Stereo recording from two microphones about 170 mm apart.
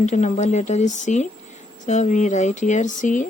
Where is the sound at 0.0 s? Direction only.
45° left (ahead or behind).